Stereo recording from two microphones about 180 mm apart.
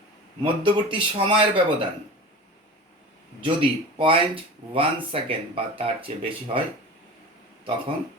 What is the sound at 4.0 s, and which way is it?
Speech, 30° right (ahead or behind).